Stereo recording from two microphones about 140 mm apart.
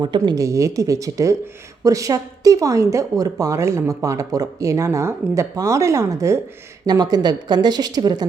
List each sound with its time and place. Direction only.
0.0 s speech: 30° right (ahead or behind)